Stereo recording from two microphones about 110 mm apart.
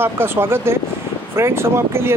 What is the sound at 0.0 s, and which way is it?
Speech, 20° right (ahead or behind).